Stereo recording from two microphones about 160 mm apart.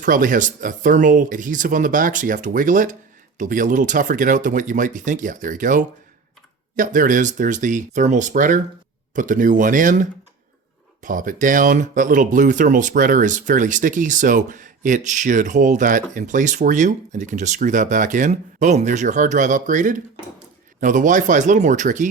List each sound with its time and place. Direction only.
0.0 s speech: 55° right (ahead or behind)